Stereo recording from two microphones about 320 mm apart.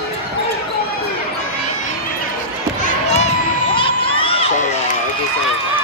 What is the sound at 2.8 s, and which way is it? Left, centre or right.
Basketball bounce, left.